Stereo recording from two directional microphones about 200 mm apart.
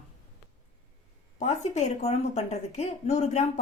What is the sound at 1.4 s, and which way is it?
A woman's voice, 35° left (ahead or behind).